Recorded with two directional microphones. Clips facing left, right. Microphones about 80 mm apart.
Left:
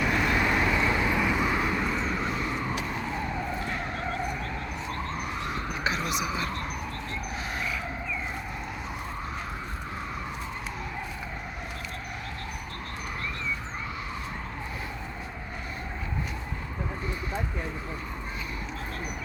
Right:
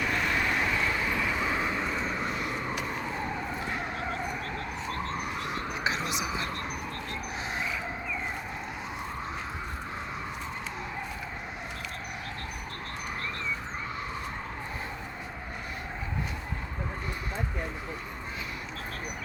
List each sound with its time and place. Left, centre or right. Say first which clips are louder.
0.0 s vehicle: left 3 dB; centre
1.8 s vehicle: left 2 dB; centre
3.6 s vehicle: left 1 dB; centre
5.8 s a sound: left 2 dB; right